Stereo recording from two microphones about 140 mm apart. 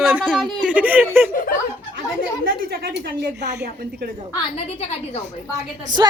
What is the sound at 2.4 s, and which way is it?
Speech, 90° right.